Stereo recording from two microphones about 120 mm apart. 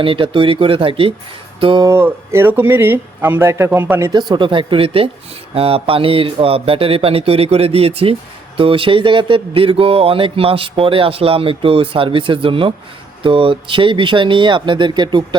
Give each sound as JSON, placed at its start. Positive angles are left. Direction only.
{"t": 0.0, "sound": "speech", "side_deg": -45}
{"t": 1.8, "sound": "speech", "side_deg": -20}
{"t": 4.1, "sound": "speech", "side_deg": -40}